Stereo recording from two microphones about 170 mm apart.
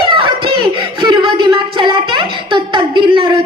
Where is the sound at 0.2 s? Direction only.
25° right (ahead or behind).